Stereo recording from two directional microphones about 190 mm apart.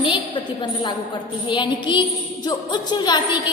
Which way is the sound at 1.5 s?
25° left (ahead or behind).